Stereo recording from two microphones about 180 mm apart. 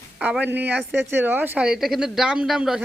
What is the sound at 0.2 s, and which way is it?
A woman's voice, 10° right (ahead or behind).